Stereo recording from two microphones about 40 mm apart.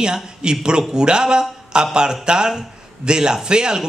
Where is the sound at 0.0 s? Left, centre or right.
Right.